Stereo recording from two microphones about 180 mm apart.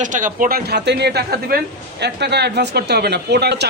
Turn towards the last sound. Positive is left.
turn(degrees=-65)  # may be behind; listen again after turning